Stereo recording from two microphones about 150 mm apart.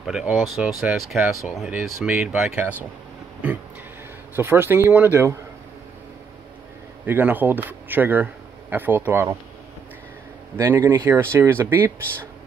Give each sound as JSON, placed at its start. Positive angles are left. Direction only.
{"t": 0.0, "sound": "speech", "side_deg": -5}
{"t": 4.4, "sound": "speech", "side_deg": -15}
{"t": 7.1, "sound": "speech", "side_deg": -10}
{"t": 10.5, "sound": "speech", "side_deg": -15}